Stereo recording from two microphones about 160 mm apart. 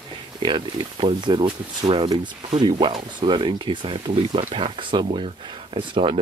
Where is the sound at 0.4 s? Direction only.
30° right (ahead or behind).